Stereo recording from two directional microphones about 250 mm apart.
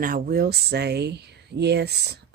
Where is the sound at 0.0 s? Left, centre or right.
Right.